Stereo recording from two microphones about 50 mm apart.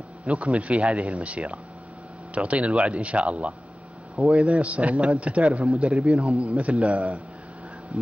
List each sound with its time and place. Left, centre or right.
0.3 s speech: right
5.5 s a man's voice: centre
6.5 s speech: right